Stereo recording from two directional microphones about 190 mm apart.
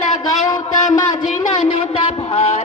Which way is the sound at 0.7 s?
40° left (ahead or behind).